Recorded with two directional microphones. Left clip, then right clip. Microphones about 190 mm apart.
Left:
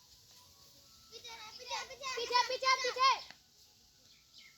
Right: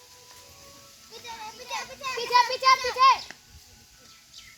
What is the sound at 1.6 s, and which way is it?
Children playing, 55° right (ahead or behind).